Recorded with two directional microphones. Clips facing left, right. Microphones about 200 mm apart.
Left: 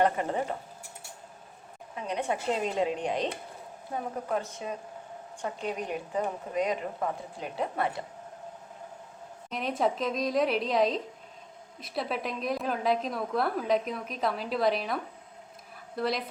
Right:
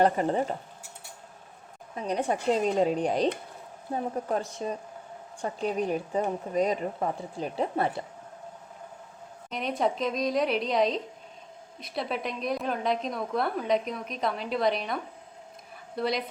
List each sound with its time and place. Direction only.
0.0 s a woman's voice: 35° right (ahead or behind)
2.0 s a woman's voice: 40° right (ahead or behind)
4.3 s a woman's voice: 30° right (ahead or behind)
9.5 s a woman's voice: centre (ahead or behind)